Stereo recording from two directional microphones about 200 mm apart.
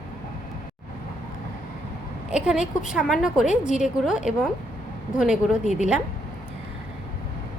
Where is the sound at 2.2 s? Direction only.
5° right (ahead or behind).